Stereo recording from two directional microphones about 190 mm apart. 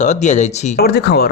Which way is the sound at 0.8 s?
55° left (ahead or behind).